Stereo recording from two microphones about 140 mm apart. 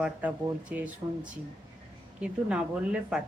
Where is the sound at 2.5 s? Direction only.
10° right (ahead or behind).